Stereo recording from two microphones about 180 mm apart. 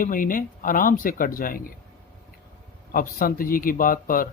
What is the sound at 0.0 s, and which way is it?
Speech, 50° left (ahead or behind).